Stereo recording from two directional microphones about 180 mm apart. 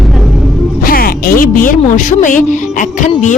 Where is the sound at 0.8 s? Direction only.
55° left (ahead or behind).